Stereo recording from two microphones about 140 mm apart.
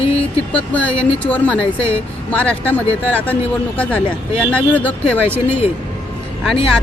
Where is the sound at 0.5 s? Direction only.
10° left (ahead or behind).